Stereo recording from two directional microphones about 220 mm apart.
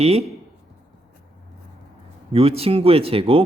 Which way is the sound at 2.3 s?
25° right (ahead or behind).